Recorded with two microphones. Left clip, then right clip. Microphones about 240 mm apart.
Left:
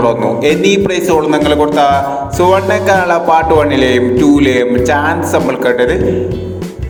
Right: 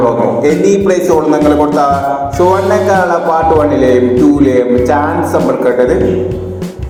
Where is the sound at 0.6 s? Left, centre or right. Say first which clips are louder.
Right 2 dB; left.